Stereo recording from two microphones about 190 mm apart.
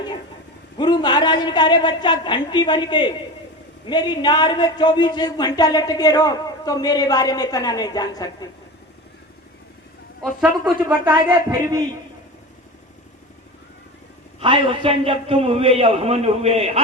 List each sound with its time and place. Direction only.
0.8 s speech: 25° left (ahead or behind)
10.2 s speech: 5° right (ahead or behind)
14.3 s a man's voice: 25° right (ahead or behind)